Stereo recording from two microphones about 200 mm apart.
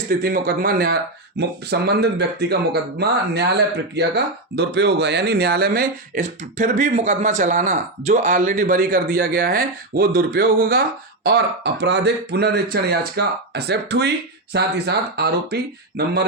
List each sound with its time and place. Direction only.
0.1 s speech: 50° right (ahead or behind)